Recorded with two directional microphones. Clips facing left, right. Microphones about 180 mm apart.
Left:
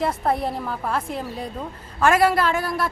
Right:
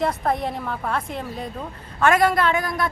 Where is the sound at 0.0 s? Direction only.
5° left (ahead or behind).